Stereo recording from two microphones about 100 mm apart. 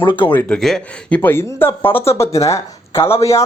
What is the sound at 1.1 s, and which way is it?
Speech, 20° left (ahead or behind).